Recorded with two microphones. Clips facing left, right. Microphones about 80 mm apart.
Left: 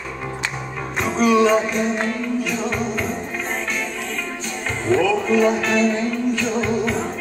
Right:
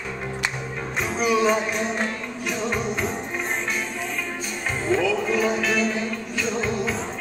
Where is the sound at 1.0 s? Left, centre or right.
Centre.